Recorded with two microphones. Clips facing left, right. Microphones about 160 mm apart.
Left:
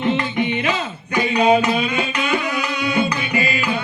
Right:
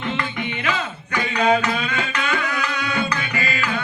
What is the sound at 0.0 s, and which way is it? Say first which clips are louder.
Music: left 6 dB; 20° left (ahead or behind).